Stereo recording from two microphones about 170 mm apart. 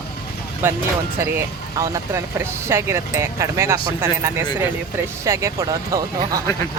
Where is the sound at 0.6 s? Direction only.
10° right (ahead or behind).